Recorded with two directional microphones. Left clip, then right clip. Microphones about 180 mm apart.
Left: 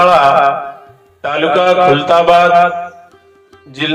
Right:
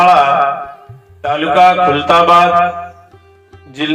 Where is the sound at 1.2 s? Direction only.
40° left (ahead or behind).